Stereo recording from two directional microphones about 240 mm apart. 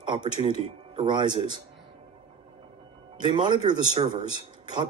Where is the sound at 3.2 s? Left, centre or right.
Centre.